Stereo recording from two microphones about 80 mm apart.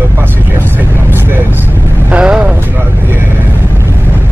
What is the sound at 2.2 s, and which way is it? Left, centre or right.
Vehicle, centre.